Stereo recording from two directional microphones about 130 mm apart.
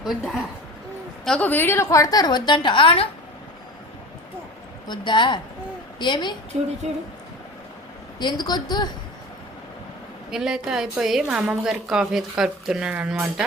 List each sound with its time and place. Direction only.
0.0 s a woman's voice: centre (ahead or behind); by 3.1 s 45° left (ahead or behind)
4.9 s a woman's voice: 35° left (ahead or behind)
6.5 s speech: 55° right (ahead or behind)
8.2 s a woman's voice: 35° left (ahead or behind)
10.3 s a woman's voice: 5° right (ahead or behind)